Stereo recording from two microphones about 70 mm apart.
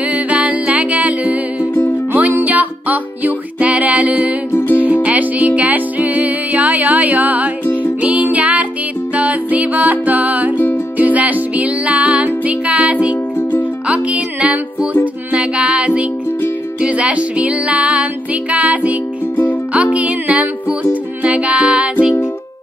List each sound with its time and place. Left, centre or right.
0.1 s music: centre